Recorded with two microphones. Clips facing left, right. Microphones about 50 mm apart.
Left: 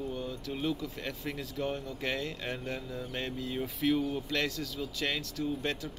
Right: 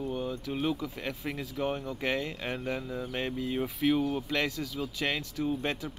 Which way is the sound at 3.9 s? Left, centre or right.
Right.